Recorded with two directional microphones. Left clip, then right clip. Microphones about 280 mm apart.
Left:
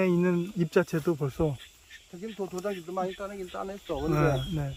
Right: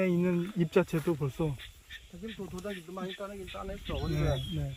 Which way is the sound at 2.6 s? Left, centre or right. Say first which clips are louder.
Left 9 dB; left.